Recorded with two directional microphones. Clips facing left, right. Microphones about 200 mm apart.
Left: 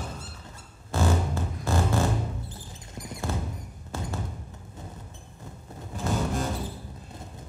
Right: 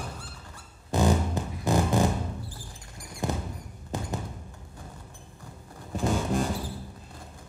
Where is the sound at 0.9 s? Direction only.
15° right (ahead or behind).